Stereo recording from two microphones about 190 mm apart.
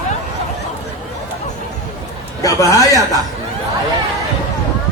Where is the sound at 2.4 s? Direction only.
20° left (ahead or behind).